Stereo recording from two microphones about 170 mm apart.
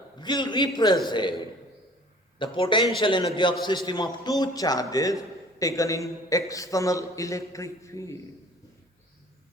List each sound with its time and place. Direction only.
0.2 s a man's voice: 25° left (ahead or behind)
2.4 s a man's voice: 30° left (ahead or behind)